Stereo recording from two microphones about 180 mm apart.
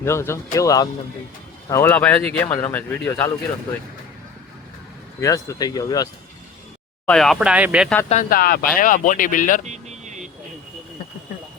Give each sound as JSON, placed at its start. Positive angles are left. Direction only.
{"t": 0.0, "sound": "speech", "side_deg": 15}
{"t": 5.2, "sound": "speech", "side_deg": 20}
{"t": 7.0, "sound": "speech", "side_deg": 5}
{"t": 8.1, "sound": "speech", "side_deg": 50}
{"t": 9.6, "sound": "a sound", "side_deg": -40}